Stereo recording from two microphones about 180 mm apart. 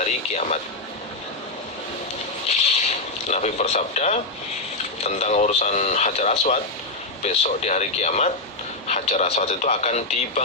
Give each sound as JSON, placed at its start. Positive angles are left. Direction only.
{"t": 0.0, "sound": "a man's voice", "side_deg": 40}
{"t": 3.2, "sound": "speech", "side_deg": 40}